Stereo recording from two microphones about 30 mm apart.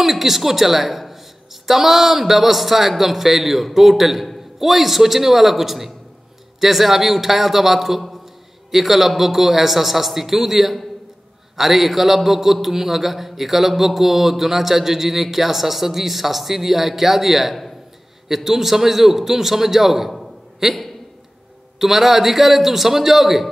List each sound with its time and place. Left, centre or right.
0.0 s a woman's voice: centre
21.7 s a woman's voice: centre